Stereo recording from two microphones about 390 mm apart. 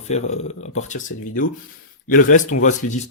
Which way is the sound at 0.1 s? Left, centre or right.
Centre.